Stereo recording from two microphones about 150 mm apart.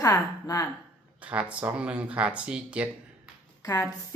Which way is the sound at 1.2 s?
10° right (ahead or behind).